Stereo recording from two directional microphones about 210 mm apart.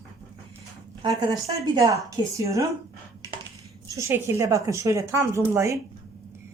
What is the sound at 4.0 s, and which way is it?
Speech, 15° right (ahead or behind).